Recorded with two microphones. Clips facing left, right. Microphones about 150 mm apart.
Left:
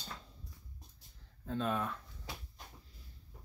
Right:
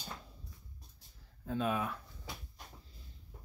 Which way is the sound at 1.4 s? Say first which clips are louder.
Right 1 dB; 5° right (ahead or behind).